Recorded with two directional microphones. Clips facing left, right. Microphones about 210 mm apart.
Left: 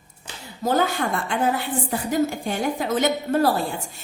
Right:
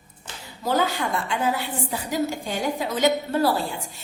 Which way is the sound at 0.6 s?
50° left (ahead or behind).